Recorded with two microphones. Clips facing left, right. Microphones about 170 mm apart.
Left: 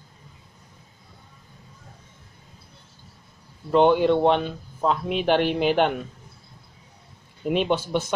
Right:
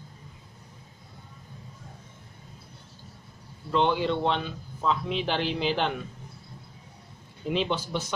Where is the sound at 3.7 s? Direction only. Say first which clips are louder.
Left 7 dB; 55° left (ahead or behind).